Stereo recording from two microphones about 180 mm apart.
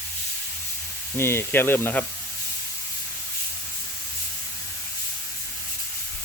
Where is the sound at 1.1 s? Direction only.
15° left (ahead or behind).